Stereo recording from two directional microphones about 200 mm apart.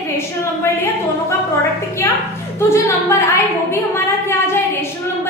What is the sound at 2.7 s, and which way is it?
Speech, 15° left (ahead or behind).